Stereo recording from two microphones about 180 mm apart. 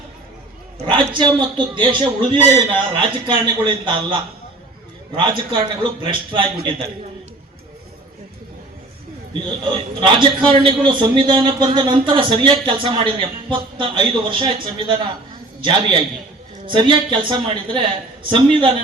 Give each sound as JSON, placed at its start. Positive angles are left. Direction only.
{"t": 0.8, "sound": "speech", "side_deg": -35}
{"t": 10.0, "sound": "speech", "side_deg": -30}